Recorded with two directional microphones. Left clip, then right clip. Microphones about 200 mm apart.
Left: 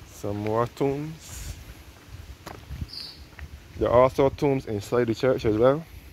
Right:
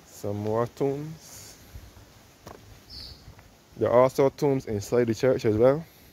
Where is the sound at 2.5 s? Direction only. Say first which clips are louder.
Left 4 dB; 10° right (ahead or behind).